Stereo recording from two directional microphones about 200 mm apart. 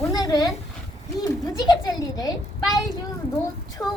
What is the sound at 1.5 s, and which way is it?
Speech, 20° left (ahead or behind).